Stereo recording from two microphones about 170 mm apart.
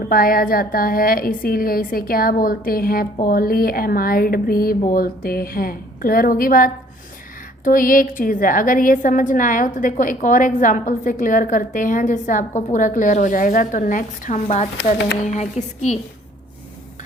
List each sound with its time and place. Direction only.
0.1 s a woman's voice: 60° left (ahead or behind)